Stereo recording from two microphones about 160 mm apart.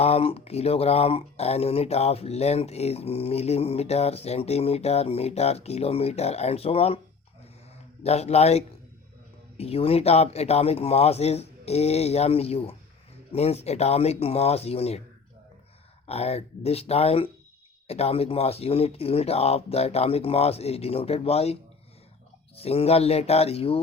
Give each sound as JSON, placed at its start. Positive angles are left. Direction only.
{"t": 0.0, "sound": "speech", "side_deg": 40}
{"t": 8.0, "sound": "speech", "side_deg": 40}
{"t": 16.0, "sound": "speech", "side_deg": 40}